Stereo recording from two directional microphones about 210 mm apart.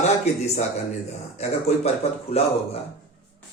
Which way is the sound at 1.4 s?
30° left (ahead or behind).